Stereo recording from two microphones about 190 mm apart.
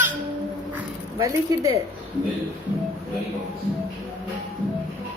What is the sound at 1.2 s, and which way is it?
Speech, 15° right (ahead or behind).